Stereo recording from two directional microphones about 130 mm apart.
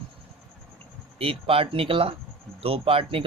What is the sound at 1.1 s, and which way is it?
Speech, 45° right (ahead or behind).